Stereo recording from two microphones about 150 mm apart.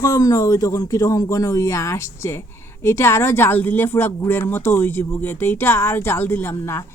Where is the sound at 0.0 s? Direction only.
20° left (ahead or behind).